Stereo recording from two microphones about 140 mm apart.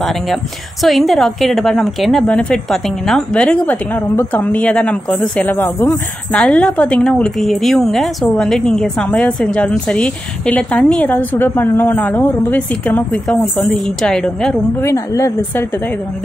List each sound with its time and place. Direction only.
0.8 s a woman's voice: centre (ahead or behind)
14.8 s a woman's voice: 20° left (ahead or behind)